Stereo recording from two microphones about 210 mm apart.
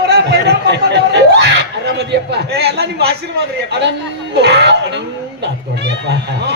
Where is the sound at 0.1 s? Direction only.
55° right (ahead or behind).